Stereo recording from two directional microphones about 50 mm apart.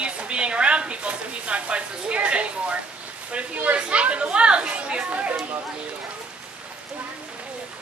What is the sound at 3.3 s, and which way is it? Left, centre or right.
Speech, right.